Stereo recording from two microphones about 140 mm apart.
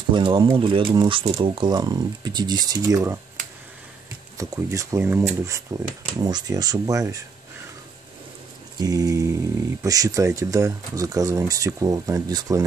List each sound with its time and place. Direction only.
0.1 s speech: 35° right (ahead or behind)
4.4 s speech: 20° right (ahead or behind)
8.7 s speech: 25° right (ahead or behind)